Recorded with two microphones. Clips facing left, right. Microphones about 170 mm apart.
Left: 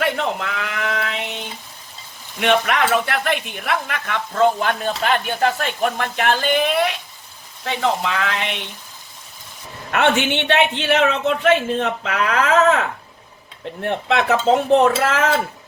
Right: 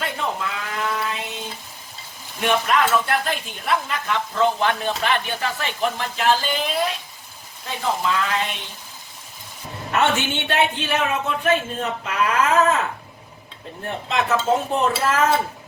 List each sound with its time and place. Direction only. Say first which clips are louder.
0.0 s a sound: left 5 dB; 75° left (ahead or behind)
2.4 s speech: left 2 dB; 70° left (ahead or behind)
7.6 s a man's voice: left 3 dB; 80° left
9.9 s a man's voice: left 3 dB; 65° left (ahead or behind)
13.8 s a man's voice: left 5 dB; 70° left (ahead or behind)